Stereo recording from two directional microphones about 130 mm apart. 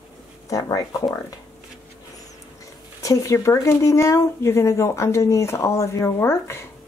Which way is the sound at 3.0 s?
25° left (ahead or behind).